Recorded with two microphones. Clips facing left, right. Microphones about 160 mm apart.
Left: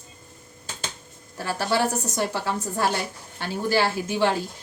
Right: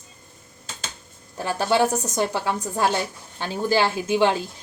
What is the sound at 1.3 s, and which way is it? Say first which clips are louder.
Speech: right 3 dB; 20° right (ahead or behind).